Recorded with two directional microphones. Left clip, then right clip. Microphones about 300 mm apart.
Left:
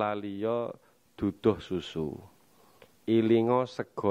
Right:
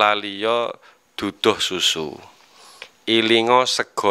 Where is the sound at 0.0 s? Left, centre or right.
Centre.